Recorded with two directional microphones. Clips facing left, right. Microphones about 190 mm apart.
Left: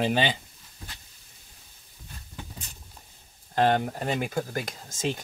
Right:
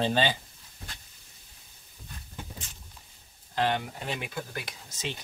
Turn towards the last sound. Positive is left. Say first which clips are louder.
# left 7 dB
turn(degrees=45)  # may be behind; listen again after turning